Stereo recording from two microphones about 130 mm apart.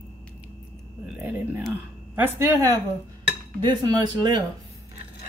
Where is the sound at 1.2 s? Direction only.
15° right (ahead or behind).